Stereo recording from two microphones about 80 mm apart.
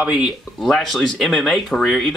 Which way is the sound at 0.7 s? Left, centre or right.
Centre.